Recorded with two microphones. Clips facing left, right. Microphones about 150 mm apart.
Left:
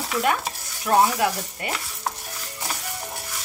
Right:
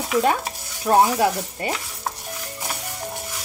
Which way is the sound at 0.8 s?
25° right (ahead or behind).